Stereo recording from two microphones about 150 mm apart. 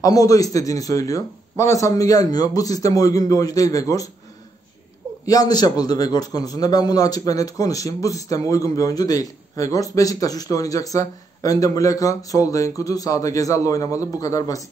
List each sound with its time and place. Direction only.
0.0 s a man's voice: 25° left (ahead or behind)
5.2 s a man's voice: 25° left (ahead or behind)